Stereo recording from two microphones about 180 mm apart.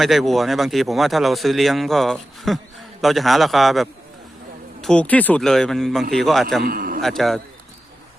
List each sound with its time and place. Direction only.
0.0 s speech: centre (ahead or behind)
6.6 s a man's voice: 55° right (ahead or behind)
7.0 s speech: centre (ahead or behind)